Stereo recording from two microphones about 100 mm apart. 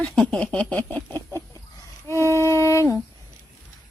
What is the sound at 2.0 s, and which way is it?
Music, 25° left (ahead or behind).